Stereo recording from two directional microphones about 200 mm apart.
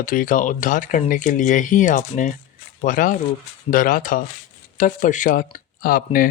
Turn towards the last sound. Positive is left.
turn(degrees=45)  # may be behind; listen again after turning